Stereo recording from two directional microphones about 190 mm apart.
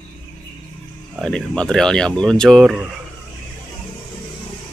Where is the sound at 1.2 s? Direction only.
5° left (ahead or behind).